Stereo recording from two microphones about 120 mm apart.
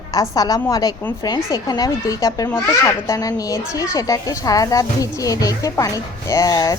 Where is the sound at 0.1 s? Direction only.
30° left (ahead or behind).